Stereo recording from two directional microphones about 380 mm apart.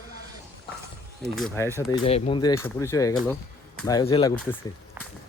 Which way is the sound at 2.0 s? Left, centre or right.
Centre.